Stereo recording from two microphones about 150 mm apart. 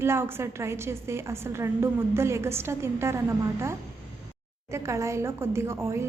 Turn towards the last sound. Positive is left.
turn(degrees=-15)  # may be behind; listen again after turning